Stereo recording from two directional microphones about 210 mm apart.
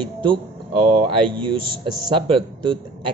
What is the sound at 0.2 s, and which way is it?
Speech, 25° right (ahead or behind).